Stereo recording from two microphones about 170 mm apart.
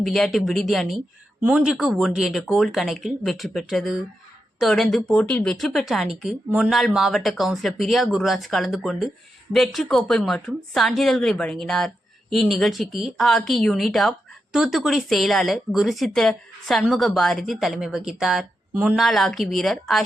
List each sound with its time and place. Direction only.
0.0 s speech: centre (ahead or behind)